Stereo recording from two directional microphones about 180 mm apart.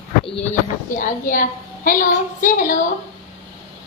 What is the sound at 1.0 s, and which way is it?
A woman's voice, 50° left (ahead or behind).